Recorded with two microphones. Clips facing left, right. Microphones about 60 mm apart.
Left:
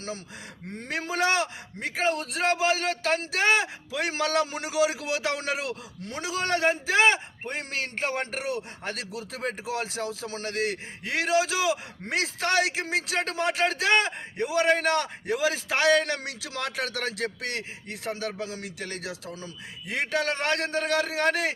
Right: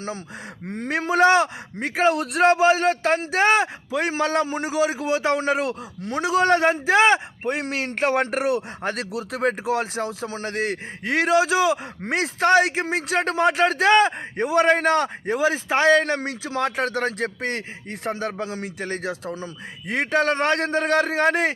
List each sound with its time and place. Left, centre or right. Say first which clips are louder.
0.8 s a man's voice: right 9 dB; right
4.1 s a man's voice: right 2 dB; right
8.8 s a man's voice: right 7 dB; right